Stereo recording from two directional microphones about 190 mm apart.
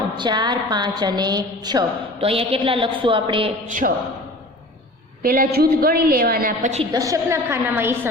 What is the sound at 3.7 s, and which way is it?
Speech, 45° right (ahead or behind).